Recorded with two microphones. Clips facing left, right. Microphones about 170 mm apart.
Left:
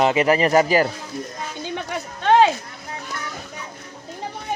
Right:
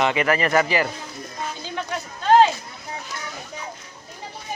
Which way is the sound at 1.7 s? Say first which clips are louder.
Left 1 dB; 65° left (ahead or behind).